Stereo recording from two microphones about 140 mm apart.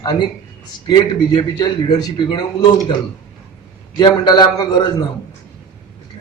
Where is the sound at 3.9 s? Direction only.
30° left (ahead or behind).